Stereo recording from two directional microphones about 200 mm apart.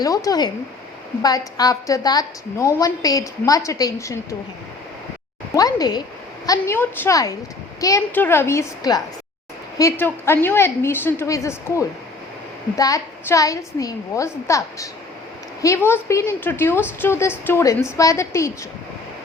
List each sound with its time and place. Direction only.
0.0 s a woman's voice: 15° left (ahead or behind)
5.5 s a woman's voice: 20° left (ahead or behind)